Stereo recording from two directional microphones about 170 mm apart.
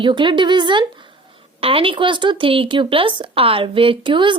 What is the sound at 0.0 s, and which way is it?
A woman's voice, 30° right (ahead or behind).